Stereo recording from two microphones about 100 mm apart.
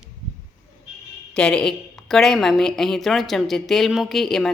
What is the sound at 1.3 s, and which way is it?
A woman's voice, 10° left (ahead or behind).